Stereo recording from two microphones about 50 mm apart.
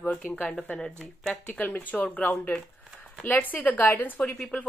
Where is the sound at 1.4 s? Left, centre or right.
Left.